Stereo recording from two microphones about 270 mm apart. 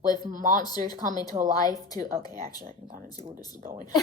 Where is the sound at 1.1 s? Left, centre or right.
Centre.